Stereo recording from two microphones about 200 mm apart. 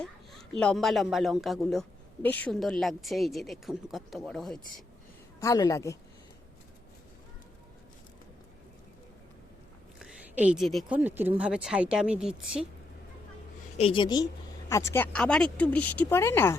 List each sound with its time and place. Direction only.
0.6 s a man's voice: 5° left (ahead or behind)
5.4 s speech: 15° left (ahead or behind)
10.0 s a man's voice: 5° right (ahead or behind)
13.7 s a woman's voice: 25° left (ahead or behind); by 16.6 s 10° left (ahead or behind)